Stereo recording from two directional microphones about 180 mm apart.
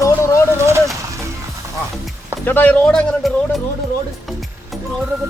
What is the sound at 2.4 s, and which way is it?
Speech, 10° left (ahead or behind).